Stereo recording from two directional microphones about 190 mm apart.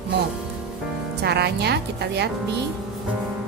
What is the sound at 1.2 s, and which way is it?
A woman's voice, 60° right (ahead or behind).